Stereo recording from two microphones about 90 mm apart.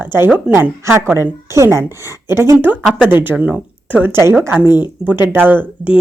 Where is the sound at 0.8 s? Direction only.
30° right (ahead or behind).